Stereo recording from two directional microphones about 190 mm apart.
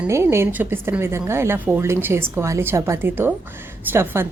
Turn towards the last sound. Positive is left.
turn(degrees=-15)  # may be behind; listen again after turning